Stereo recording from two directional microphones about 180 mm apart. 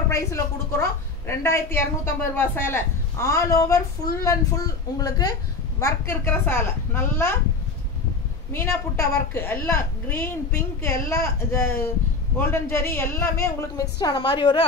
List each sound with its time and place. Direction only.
0.1 s a woman's voice: 15° left (ahead or behind)
8.5 s a woman's voice: 15° left (ahead or behind)